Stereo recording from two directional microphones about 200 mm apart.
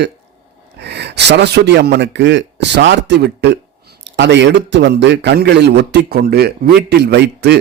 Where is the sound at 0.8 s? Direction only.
55° right (ahead or behind).